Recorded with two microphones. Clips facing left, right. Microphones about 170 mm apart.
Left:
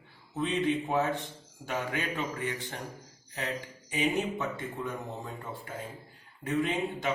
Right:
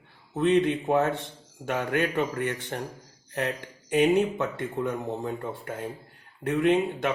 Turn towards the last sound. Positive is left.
turn(degrees=-65)  # may be behind; listen again after turning